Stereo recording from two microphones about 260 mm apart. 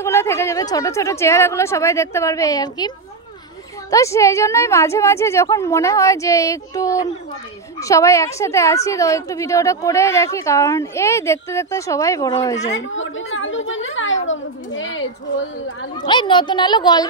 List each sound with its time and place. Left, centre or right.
0.0 s a woman's voice: centre
3.9 s a woman's voice: centre
12.9 s a woman's voice: left
16.0 s a woman's voice: centre